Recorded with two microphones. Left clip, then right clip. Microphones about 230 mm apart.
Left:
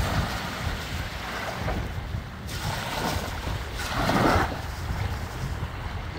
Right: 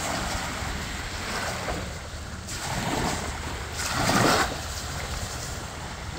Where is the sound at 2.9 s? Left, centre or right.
Left.